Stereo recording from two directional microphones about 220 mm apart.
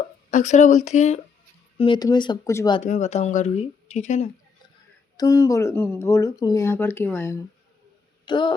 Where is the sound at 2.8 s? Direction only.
30° left (ahead or behind).